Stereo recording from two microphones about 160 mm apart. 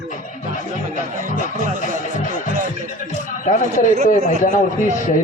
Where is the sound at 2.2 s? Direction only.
55° left (ahead or behind).